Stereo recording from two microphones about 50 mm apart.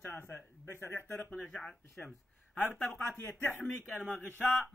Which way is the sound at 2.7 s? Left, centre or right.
Centre.